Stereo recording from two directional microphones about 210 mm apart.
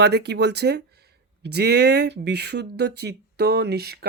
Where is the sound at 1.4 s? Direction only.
50° right (ahead or behind).